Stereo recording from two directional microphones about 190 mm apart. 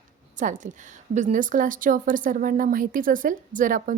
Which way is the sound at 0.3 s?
40° right (ahead or behind).